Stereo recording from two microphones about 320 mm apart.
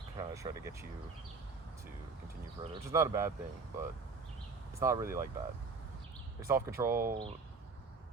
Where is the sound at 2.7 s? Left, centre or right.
Centre.